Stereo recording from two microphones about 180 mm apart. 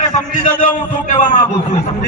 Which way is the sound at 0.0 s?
45° left (ahead or behind).